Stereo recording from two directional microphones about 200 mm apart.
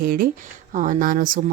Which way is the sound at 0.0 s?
50° right (ahead or behind).